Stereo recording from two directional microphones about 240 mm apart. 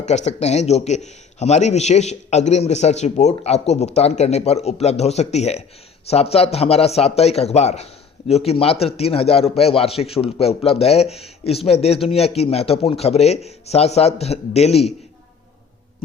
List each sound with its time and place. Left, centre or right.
0.0 s a man's voice: left